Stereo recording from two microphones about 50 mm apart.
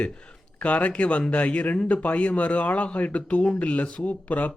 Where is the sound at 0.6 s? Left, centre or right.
Left.